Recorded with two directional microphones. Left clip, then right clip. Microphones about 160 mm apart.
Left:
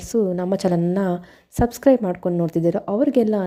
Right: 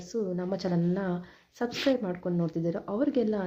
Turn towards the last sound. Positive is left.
turn(degrees=45)  # may be behind; listen again after turning